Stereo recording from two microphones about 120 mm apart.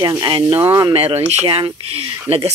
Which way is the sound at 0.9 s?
55° right (ahead or behind).